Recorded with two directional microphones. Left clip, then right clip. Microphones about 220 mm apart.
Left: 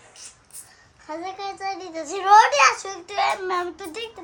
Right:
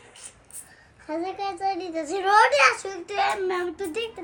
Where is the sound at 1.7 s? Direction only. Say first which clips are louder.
Right 2 dB; 15° left (ahead or behind).